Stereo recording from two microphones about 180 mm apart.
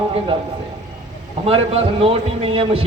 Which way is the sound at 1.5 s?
30° right (ahead or behind).